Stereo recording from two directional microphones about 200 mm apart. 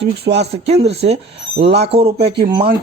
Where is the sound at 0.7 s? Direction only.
30° right (ahead or behind).